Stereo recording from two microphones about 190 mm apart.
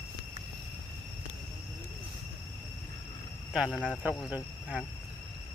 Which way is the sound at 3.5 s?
Centre (ahead or behind).